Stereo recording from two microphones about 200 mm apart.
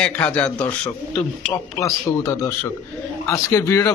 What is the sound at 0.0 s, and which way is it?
Speech, 5° left (ahead or behind).